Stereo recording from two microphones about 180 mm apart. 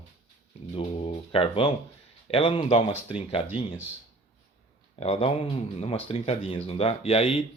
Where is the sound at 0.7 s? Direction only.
30° left (ahead or behind).